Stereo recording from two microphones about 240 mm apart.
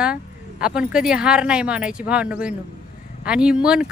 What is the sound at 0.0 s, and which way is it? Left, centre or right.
Speech, centre.